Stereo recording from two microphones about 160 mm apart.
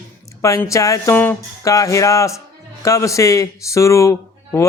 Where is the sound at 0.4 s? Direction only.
20° left (ahead or behind).